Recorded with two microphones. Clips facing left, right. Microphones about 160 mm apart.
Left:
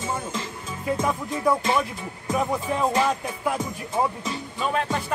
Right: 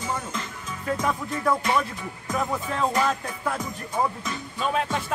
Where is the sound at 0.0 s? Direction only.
30° left (ahead or behind).